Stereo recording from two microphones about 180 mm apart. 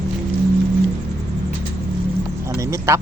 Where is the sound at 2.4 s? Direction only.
15° right (ahead or behind).